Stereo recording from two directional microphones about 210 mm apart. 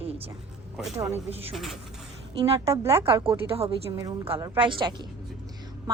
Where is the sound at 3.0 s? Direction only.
25° right (ahead or behind).